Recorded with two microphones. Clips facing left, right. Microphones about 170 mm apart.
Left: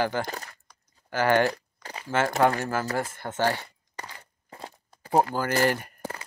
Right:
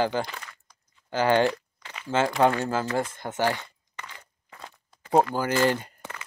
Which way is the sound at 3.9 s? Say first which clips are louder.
Left 2 dB; 35° left (ahead or behind).